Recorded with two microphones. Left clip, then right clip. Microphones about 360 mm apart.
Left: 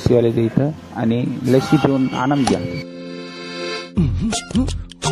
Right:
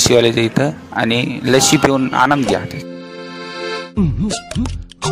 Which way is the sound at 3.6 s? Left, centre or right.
Centre.